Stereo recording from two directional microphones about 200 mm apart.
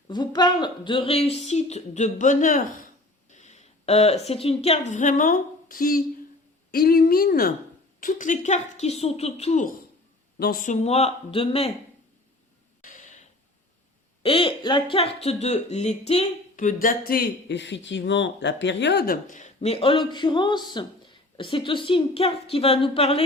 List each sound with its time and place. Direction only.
0.1 s speech: 20° left (ahead or behind)
12.8 s a sound: 40° left (ahead or behind)
14.2 s speech: 25° left (ahead or behind)
17.1 s speech: 55° left (ahead or behind); by 23.2 s 30° left (ahead or behind)